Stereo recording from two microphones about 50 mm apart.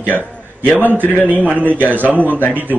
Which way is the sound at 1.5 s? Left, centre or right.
Right.